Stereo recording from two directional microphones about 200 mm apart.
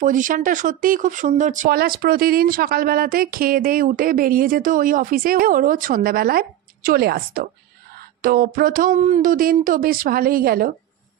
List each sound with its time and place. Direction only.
0.0 s speech: 40° right (ahead or behind)